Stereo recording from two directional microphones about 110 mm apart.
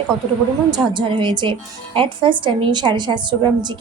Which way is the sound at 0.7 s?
45° right (ahead or behind).